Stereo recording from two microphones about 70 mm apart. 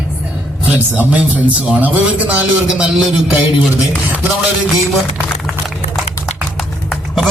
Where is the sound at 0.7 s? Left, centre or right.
Right.